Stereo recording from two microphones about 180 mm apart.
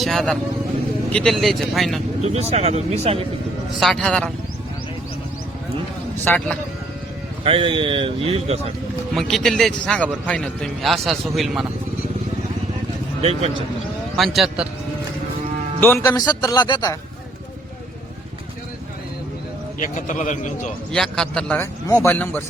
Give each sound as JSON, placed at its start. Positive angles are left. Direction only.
{"t": 0.0, "sound": "a man's voice", "side_deg": 0}
{"t": 2.2, "sound": "speech", "side_deg": -35}
{"t": 3.8, "sound": "a man's voice", "side_deg": 5}
{"t": 6.2, "sound": "speech", "side_deg": 10}
{"t": 7.4, "sound": "speech", "side_deg": -30}
{"t": 9.1, "sound": "a man's voice", "side_deg": 0}
{"t": 13.2, "sound": "speech", "side_deg": -35}
{"t": 14.2, "sound": "a man's voice", "side_deg": 0}
{"t": 15.8, "sound": "speech", "side_deg": 15}
{"t": 19.8, "sound": "a man's voice", "side_deg": 45}
{"t": 20.9, "sound": "a man's voice", "side_deg": 5}